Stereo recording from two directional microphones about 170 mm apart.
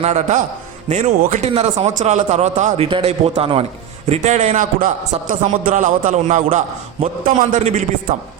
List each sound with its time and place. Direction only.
0.0 s a man's voice: 45° right (ahead or behind)